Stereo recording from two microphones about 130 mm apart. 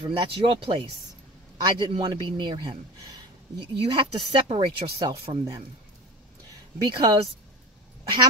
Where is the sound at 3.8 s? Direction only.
45° right (ahead or behind).